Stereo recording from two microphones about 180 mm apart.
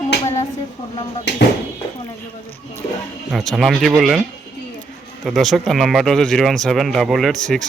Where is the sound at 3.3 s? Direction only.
Centre (ahead or behind).